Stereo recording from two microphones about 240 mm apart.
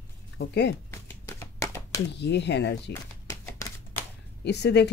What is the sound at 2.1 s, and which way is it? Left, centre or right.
Speech, left.